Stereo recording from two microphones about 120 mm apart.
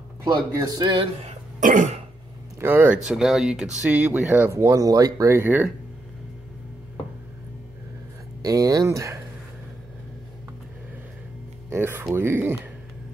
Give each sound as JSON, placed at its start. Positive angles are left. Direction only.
{"t": 0.2, "sound": "speech", "side_deg": -30}
{"t": 1.2, "sound": "throat clearing", "side_deg": -90}
{"t": 2.6, "sound": "speech", "side_deg": -15}
{"t": 3.1, "sound": "speech", "side_deg": -5}
{"t": 4.1, "sound": "speech", "side_deg": -15}
{"t": 8.4, "sound": "speech", "side_deg": -30}
{"t": 11.7, "sound": "speech", "side_deg": -20}